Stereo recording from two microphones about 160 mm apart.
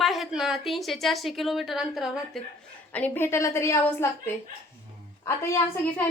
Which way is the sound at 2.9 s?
10° left (ahead or behind).